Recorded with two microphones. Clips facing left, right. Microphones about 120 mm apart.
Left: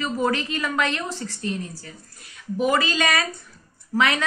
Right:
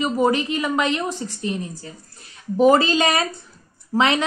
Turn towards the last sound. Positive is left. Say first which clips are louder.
# right 3 dB
turn(degrees=-25)  # may be behind; listen again after turning